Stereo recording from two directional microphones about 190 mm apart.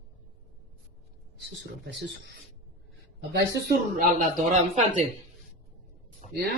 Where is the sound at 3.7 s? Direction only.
50° right (ahead or behind).